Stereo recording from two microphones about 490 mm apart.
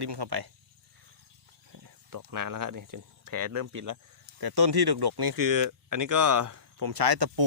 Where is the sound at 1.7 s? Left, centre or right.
Right.